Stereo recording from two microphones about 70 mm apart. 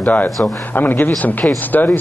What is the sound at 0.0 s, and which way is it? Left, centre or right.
A man's voice, left.